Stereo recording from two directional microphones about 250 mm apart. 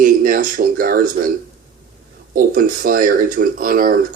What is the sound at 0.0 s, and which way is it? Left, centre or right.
Speech, right.